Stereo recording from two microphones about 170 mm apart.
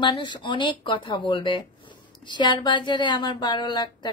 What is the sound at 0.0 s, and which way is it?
Speech, 25° left (ahead or behind).